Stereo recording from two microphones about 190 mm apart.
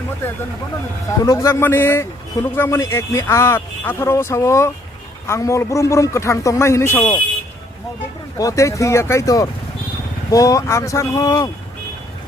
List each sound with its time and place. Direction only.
1.2 s speech: 20° left (ahead or behind)
8.4 s speech: 15° left (ahead or behind)